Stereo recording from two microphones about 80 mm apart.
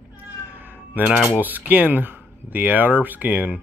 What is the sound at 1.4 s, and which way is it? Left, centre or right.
Speech, right.